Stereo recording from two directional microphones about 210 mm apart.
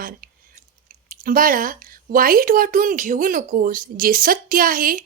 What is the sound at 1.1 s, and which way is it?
A woman's voice, 40° right (ahead or behind).